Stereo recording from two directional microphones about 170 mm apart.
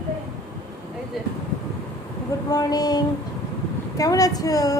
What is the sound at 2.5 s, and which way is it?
Speech, 20° left (ahead or behind).